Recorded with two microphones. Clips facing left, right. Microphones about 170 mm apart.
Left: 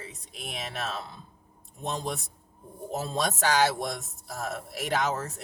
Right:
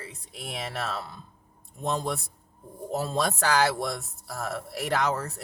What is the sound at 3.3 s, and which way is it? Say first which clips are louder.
Speech: left 2 dB; 20° left (ahead or behind).